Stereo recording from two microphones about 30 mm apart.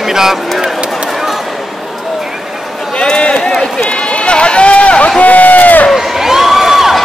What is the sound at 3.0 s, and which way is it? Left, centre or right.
Run, left.